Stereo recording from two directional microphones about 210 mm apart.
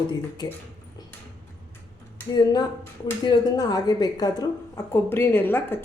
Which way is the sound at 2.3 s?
20° left (ahead or behind).